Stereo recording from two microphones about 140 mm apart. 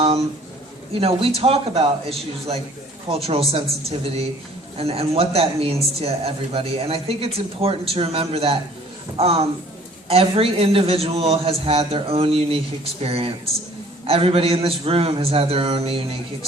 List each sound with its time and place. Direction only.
0.9 s a woman's voice: 40° right (ahead or behind)